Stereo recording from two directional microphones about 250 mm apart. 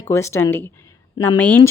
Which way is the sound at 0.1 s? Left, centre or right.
Centre.